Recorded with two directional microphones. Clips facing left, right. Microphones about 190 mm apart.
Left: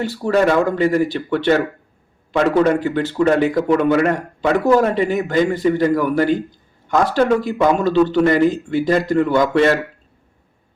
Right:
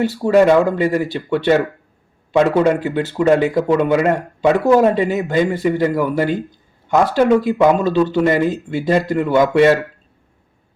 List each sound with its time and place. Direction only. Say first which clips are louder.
0.0 s speech: right 4 dB; 20° right (ahead or behind)